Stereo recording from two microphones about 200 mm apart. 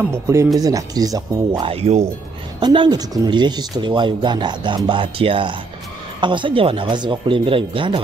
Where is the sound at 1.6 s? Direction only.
30° right (ahead or behind).